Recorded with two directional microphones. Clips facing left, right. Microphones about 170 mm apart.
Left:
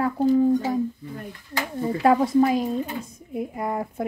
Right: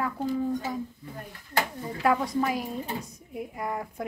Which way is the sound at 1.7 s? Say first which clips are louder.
Left 8 dB; 30° left (ahead or behind).